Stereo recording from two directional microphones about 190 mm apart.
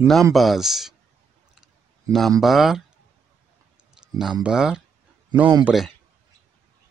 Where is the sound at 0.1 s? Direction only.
Centre (ahead or behind).